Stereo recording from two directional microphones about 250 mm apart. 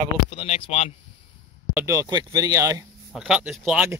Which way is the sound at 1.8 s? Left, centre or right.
Centre.